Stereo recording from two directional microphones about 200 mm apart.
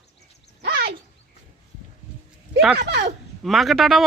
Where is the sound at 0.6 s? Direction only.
55° right (ahead or behind).